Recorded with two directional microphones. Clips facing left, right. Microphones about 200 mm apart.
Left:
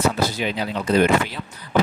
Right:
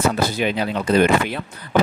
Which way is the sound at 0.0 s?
55° right (ahead or behind).